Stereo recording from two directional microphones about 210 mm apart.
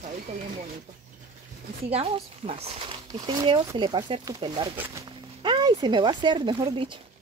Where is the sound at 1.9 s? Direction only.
30° right (ahead or behind).